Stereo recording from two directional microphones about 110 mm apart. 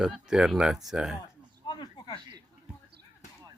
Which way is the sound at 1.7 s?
45° left (ahead or behind).